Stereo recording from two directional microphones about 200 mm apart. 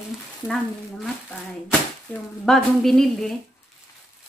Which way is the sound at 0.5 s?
Centre (ahead or behind).